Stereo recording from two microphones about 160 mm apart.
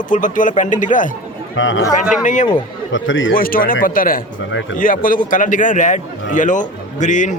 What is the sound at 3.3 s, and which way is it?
A man's voice, 65° left (ahead or behind).